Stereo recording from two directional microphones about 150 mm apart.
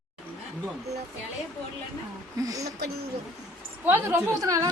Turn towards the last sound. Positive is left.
turn(degrees=-20)  # may be behind; listen again after turning